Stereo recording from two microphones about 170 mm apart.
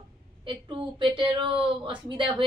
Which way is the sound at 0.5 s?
30° right (ahead or behind).